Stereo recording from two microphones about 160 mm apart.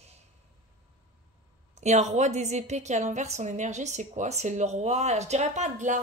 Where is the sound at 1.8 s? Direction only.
45° right (ahead or behind).